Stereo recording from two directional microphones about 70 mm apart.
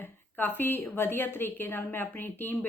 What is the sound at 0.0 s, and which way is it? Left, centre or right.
A woman's voice, left.